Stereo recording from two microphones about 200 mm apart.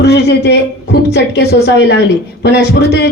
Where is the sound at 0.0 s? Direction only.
55° left (ahead or behind).